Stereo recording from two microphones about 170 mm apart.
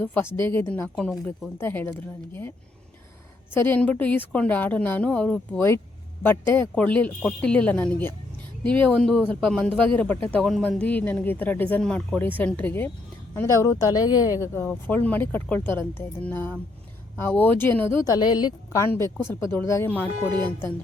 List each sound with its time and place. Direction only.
0.0 s speech: 10° left (ahead or behind)
3.5 s speech: 10° left (ahead or behind)